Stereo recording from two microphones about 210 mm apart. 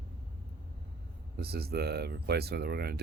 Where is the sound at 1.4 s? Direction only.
50° right (ahead or behind).